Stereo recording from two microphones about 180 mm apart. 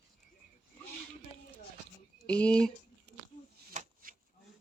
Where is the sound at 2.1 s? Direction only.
5° left (ahead or behind).